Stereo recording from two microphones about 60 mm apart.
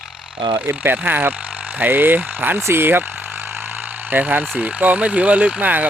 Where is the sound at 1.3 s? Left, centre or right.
Right.